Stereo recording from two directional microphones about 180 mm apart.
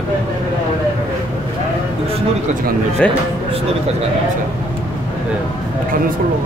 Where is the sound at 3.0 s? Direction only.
5° left (ahead or behind).